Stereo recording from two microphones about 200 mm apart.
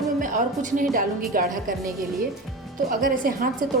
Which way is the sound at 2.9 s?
45° right (ahead or behind).